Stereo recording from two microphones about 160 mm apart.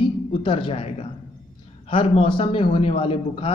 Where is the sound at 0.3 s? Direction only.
35° left (ahead or behind).